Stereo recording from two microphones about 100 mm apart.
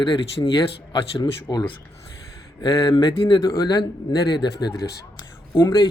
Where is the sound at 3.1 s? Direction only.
65° left (ahead or behind).